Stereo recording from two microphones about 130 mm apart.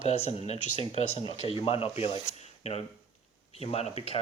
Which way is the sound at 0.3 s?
55° left (ahead or behind).